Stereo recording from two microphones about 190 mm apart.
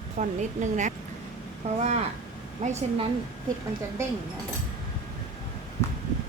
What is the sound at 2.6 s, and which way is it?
Speech, 35° right (ahead or behind).